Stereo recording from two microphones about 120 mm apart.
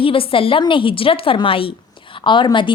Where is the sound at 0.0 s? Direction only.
50° left (ahead or behind).